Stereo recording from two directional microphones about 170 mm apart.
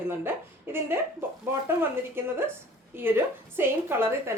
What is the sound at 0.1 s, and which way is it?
A woman's voice, 15° right (ahead or behind).